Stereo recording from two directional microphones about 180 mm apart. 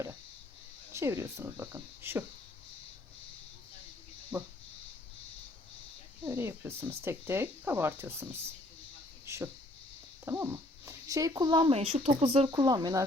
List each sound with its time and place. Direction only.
0.9 s speech: 15° right (ahead or behind)
4.3 s speech: 5° right (ahead or behind)
6.2 s speech: 15° right (ahead or behind)